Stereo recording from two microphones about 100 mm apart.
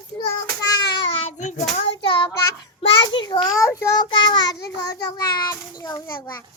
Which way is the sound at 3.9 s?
45° left (ahead or behind).